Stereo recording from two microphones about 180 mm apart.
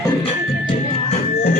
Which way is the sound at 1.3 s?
55° left (ahead or behind).